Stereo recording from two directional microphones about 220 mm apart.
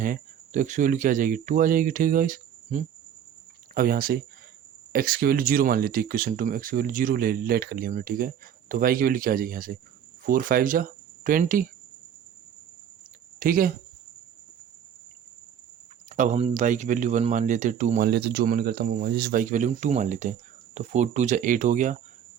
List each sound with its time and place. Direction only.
0.0 s speech: 35° right (ahead or behind)
13.4 s speech: 40° right (ahead or behind)
16.0 s speech: 35° right (ahead or behind)
18.1 s speech: 45° right (ahead or behind)